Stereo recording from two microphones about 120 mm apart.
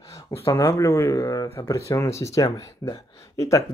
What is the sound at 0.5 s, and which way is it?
Speech, 25° left (ahead or behind).